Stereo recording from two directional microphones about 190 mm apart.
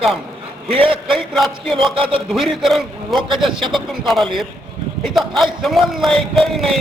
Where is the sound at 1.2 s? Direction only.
Centre (ahead or behind).